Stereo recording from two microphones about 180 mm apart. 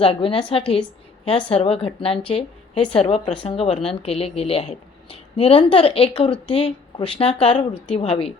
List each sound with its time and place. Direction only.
0.0 s a woman's voice: 30° left (ahead or behind)